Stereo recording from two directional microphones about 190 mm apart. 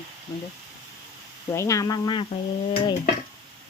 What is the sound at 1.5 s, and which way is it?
Speech, 15° left (ahead or behind).